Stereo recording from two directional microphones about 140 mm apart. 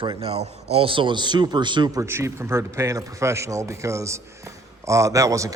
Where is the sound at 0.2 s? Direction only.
45° right (ahead or behind).